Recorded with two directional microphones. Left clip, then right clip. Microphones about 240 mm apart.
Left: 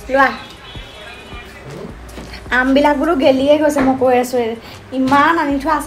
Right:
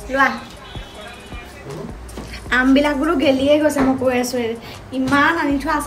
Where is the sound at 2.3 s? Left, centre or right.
Centre.